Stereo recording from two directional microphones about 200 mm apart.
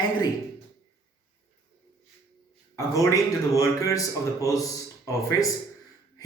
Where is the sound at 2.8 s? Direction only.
15° left (ahead or behind).